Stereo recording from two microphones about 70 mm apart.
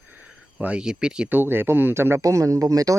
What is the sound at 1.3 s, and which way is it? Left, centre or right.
Speech, right.